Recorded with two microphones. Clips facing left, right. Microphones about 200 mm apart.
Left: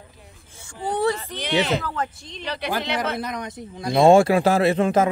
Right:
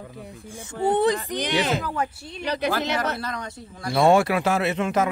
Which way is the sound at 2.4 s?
40° right (ahead or behind).